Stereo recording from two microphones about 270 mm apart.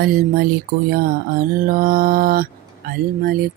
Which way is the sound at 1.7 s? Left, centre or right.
Right.